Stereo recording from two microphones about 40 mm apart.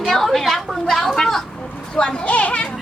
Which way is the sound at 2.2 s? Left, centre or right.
Left.